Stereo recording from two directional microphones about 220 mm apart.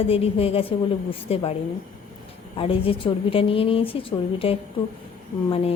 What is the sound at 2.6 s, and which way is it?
A woman's voice, 25° left (ahead or behind).